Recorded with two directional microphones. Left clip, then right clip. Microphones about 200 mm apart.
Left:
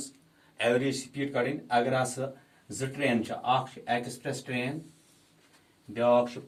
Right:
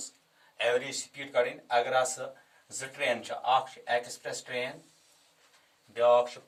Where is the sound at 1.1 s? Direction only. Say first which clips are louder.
Right 5 dB; 15° left (ahead or behind).